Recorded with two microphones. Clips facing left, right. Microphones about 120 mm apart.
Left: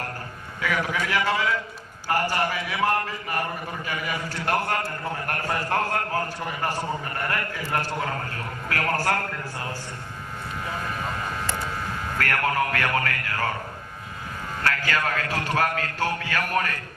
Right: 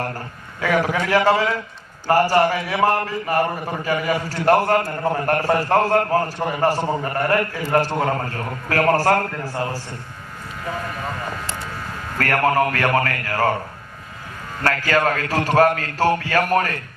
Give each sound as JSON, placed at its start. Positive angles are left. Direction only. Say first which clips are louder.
{"t": 0.6, "sound": "a man's voice", "louder": "right 7 dB", "side_deg": -40}
{"t": 4.8, "sound": "a man's voice", "louder": "right 8 dB", "side_deg": -55}
{"t": 5.2, "sound": "a man's voice", "louder": "right 9 dB", "side_deg": -40}
{"t": 12.2, "sound": "a man's voice", "louder": "right 7 dB", "side_deg": -40}
{"t": 14.6, "sound": "a man's voice", "louder": "right 7 dB", "side_deg": -40}